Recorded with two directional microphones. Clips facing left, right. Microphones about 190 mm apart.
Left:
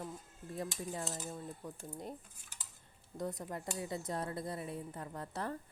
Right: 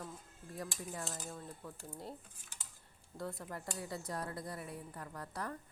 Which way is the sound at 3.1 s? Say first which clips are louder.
Left 3 dB; 20° left (ahead or behind).